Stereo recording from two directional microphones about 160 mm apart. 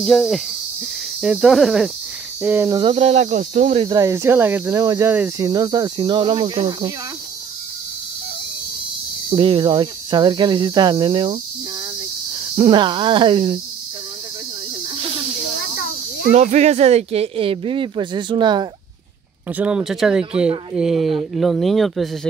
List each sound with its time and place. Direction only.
0.0 s speech: centre (ahead or behind)
2.9 s speech: 40° right (ahead or behind)
3.7 s speech: 30° right (ahead or behind)
4.0 s speech: 20° right (ahead or behind)
9.3 s speech: 35° right (ahead or behind)
12.5 s speech: 35° right (ahead or behind)
16.3 s speech: 45° right (ahead or behind); by 18.7 s 30° right (ahead or behind)
19.5 s speech: 5° right (ahead or behind)